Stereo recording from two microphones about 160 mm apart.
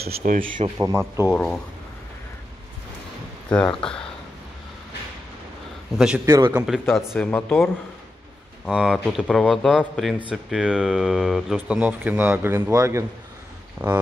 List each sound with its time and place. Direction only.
0.1 s speech: 55° right (ahead or behind)
0.7 s speech: 15° right (ahead or behind)
3.5 s speech: 5° left (ahead or behind)
5.9 s speech: 5° right (ahead or behind)
6.2 s a man's voice: 20° right (ahead or behind)
6.5 s speech: 5° right (ahead or behind)
7.2 s speech: 10° left (ahead or behind)
8.6 s speech: 5° right (ahead or behind)